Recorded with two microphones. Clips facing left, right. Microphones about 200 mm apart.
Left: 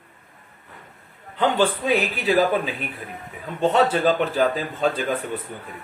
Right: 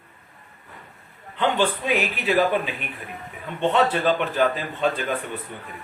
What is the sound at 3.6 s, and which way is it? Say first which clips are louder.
A man's voice: left 2 dB; 35° left (ahead or behind).